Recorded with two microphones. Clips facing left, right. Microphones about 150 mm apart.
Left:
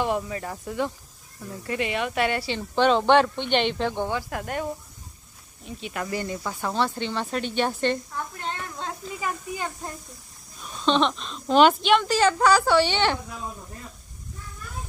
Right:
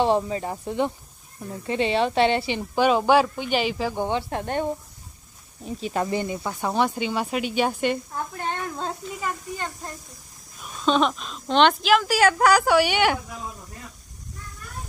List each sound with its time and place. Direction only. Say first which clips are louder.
0.0 s speech: right 5 dB; 25° right (ahead or behind); by 4.1 s 5° right (ahead or behind)
4.1 s speech: right 3 dB; 25° right (ahead or behind)
6.0 s speech: right 3 dB; 20° right (ahead or behind)
9.2 s speech: left 1 dB; 5° left (ahead or behind)
10.6 s a woman's voice: right 1 dB; 5° right (ahead or behind)